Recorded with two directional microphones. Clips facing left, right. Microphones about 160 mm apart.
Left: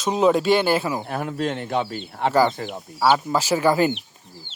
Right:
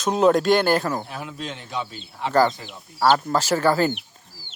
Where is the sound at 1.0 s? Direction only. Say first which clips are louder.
Left 8 dB; 55° left (ahead or behind).